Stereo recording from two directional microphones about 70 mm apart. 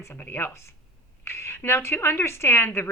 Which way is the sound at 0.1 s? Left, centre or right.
Left.